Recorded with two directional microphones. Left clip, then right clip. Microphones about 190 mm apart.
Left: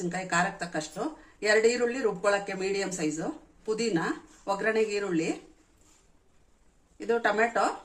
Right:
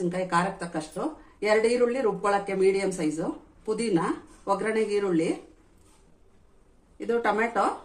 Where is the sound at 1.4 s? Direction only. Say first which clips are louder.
Right 1 dB; 25° left (ahead or behind).